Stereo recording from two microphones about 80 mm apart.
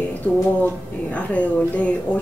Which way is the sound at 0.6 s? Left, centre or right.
Centre.